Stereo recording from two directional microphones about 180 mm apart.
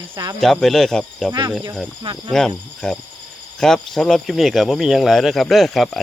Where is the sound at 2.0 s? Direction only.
25° right (ahead or behind).